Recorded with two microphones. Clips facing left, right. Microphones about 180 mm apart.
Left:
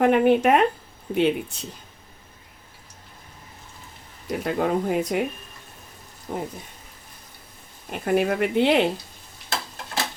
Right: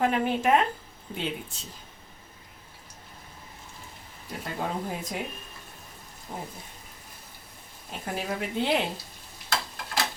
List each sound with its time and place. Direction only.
0.0 s speech: 60° left (ahead or behind)
4.3 s speech: 70° left (ahead or behind)
6.3 s speech: 55° left (ahead or behind)
7.9 s speech: 65° left (ahead or behind)